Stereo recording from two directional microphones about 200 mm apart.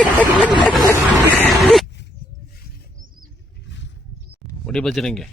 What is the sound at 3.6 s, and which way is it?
Roaring cats, 60° left (ahead or behind).